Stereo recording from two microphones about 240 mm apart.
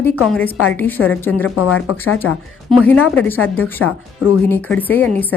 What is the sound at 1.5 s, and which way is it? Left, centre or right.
Speech, left.